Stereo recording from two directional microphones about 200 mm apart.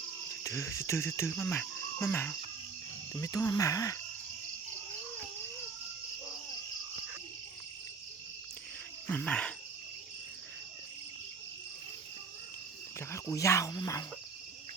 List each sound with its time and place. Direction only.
0.4 s speech: 15° left (ahead or behind)
1.3 s cricket: 10° left (ahead or behind)
3.1 s speech: 15° left (ahead or behind)
9.0 s cricket: 5° left (ahead or behind)
13.0 s speech: 15° left (ahead or behind)